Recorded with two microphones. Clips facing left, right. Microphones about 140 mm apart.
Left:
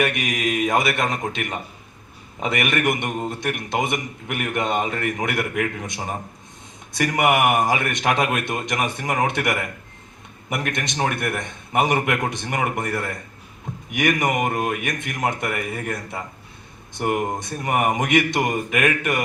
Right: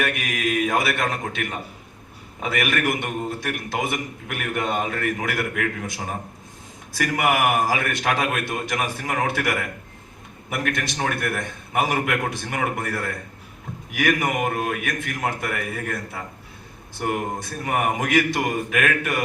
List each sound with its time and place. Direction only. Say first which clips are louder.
0.2 s a man's voice: left 1 dB; 15° left (ahead or behind)
10.8 s a man's voice: left 2 dB; 15° left (ahead or behind)
17.0 s a man's voice: left 3 dB; 10° left (ahead or behind)